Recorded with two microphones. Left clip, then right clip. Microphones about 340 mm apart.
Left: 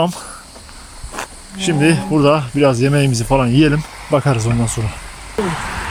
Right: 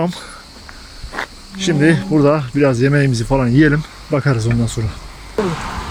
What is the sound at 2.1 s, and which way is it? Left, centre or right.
Speech, centre.